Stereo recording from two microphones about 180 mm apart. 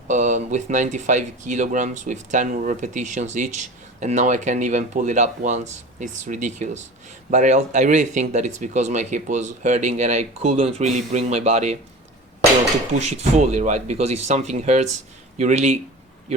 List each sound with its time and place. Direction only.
0.1 s speech: 40° right (ahead or behind)
13.0 s speech: 40° right (ahead or behind)